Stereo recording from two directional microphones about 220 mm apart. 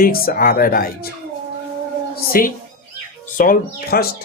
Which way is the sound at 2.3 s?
40° left (ahead or behind).